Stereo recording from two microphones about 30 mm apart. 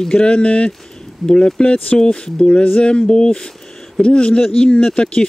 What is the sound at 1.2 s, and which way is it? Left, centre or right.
Speech, left.